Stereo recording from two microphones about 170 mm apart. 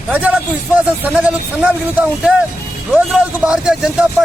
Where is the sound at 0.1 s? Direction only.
10° right (ahead or behind).